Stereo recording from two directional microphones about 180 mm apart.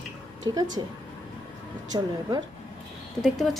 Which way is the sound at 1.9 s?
25° right (ahead or behind).